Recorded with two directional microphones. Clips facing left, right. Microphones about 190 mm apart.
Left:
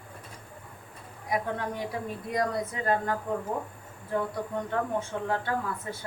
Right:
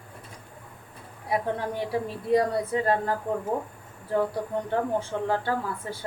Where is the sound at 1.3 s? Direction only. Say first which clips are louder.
Right 3 dB; 30° right (ahead or behind).